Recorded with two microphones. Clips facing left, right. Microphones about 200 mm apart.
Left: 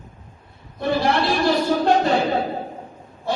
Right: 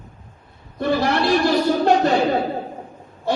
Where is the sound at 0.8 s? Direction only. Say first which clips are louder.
Right 1 dB; 50° right (ahead or behind).